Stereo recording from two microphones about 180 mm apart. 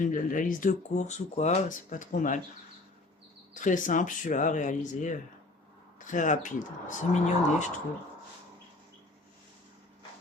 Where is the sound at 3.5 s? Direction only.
45° left (ahead or behind).